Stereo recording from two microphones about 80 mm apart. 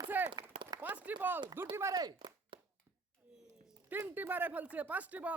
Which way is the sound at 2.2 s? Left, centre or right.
Right.